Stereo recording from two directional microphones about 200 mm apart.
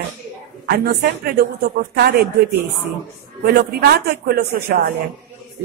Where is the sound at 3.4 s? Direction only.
55° right (ahead or behind).